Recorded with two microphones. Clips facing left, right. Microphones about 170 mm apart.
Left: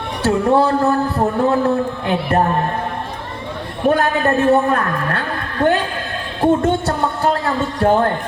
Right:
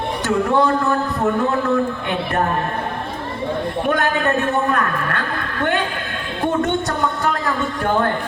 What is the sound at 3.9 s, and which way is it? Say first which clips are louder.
Speech: left 5 dB; 30° left (ahead or behind).